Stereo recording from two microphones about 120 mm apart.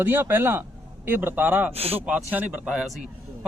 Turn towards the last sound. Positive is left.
turn(degrees=-5)  # may be behind; listen again after turning